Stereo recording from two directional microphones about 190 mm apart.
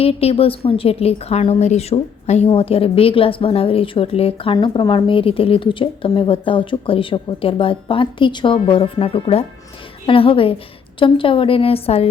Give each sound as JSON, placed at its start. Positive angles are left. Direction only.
{"t": 0.0, "sound": "a woman's voice", "side_deg": 30}